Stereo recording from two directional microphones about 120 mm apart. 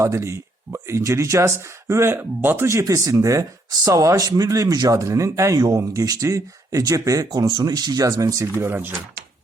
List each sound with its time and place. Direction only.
0.0 s speech: 25° right (ahead or behind)